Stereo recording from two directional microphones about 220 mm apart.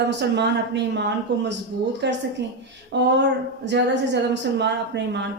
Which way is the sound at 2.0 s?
50° right (ahead or behind).